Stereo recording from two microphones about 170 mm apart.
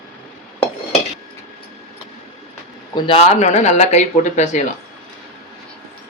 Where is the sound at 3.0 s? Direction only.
30° left (ahead or behind).